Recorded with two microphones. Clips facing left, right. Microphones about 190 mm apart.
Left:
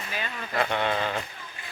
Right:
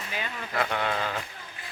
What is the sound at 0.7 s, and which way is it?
Speech, centre (ahead or behind).